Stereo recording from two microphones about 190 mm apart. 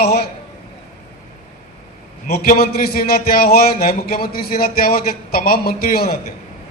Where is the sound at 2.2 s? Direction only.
55° left (ahead or behind).